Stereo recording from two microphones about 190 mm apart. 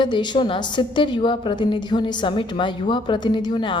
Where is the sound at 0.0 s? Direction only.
25° left (ahead or behind).